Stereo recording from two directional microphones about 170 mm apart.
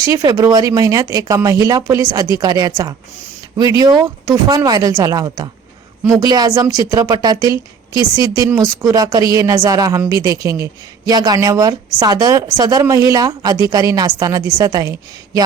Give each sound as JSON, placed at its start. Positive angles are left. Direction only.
{"t": 0.0, "sound": "a woman's voice", "side_deg": -20}